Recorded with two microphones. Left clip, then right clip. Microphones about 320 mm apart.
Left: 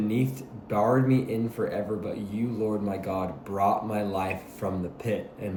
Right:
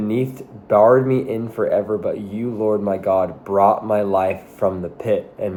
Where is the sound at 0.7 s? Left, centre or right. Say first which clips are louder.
Right 11 dB; centre.